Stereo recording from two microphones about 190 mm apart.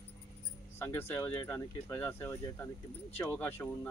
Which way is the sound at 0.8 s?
15° left (ahead or behind).